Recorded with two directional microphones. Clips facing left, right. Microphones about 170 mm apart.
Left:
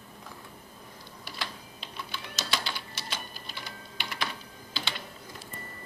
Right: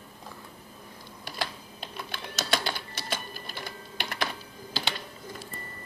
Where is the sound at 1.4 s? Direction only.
50° right (ahead or behind).